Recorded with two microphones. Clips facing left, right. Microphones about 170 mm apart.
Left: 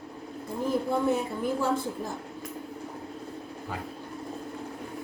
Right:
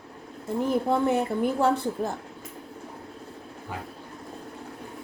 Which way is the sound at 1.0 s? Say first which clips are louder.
Right 3 dB; 65° right (ahead or behind).